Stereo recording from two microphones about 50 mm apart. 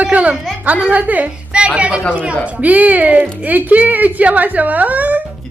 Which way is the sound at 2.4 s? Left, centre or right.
Right.